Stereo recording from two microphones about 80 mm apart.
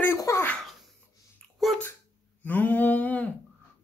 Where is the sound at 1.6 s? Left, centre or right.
Centre.